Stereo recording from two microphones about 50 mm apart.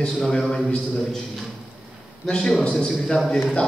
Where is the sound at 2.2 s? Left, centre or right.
Centre.